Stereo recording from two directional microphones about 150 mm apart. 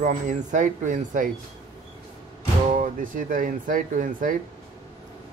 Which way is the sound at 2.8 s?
60° right (ahead or behind).